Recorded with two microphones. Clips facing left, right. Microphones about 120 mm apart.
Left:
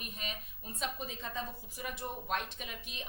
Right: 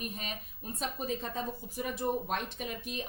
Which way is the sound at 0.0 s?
40° right (ahead or behind).